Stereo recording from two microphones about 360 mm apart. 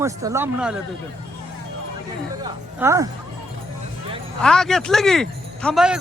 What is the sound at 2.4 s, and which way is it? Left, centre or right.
Speech, centre.